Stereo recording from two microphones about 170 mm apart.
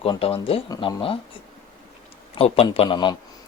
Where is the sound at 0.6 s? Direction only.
20° left (ahead or behind).